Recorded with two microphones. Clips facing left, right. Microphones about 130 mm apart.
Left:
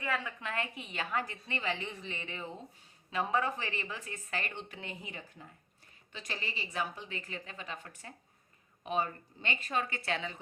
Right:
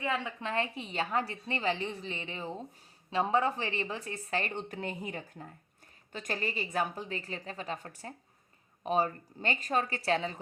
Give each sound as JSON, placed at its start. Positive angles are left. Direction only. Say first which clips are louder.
{"t": 0.0, "sound": "a woman's voice", "louder": "right 3 dB", "side_deg": -25}